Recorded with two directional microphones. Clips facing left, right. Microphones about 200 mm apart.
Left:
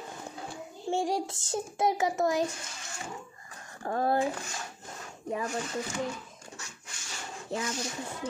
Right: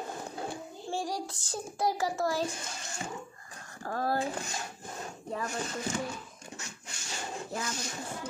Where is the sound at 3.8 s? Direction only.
20° left (ahead or behind).